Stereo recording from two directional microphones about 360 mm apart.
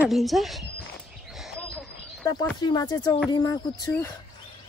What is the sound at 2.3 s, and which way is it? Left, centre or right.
Speech, centre.